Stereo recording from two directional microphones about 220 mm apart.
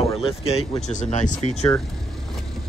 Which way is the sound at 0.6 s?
Centre (ahead or behind).